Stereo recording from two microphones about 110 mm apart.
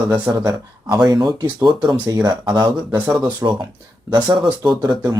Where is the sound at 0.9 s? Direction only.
40° right (ahead or behind).